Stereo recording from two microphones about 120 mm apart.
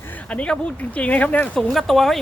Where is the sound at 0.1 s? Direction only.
10° left (ahead or behind).